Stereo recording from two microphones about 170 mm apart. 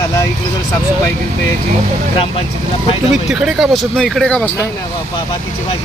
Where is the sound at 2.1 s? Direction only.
30° left (ahead or behind).